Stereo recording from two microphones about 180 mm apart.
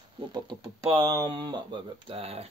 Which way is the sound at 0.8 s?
20° right (ahead or behind).